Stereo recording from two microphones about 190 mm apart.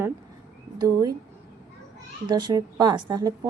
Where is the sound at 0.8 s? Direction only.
20° right (ahead or behind).